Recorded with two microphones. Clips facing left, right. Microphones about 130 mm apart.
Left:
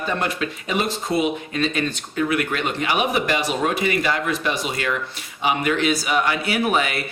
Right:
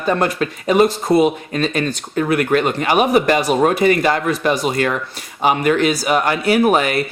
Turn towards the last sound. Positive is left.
turn(degrees=-45)  # may be behind; listen again after turning